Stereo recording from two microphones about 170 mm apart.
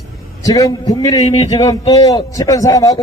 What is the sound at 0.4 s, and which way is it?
Speech, 20° left (ahead or behind).